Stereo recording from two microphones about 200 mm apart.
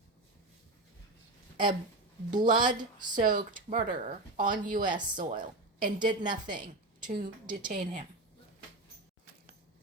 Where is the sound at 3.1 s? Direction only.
40° right (ahead or behind).